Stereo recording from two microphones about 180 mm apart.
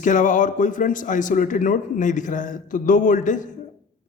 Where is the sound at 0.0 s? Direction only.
45° left (ahead or behind).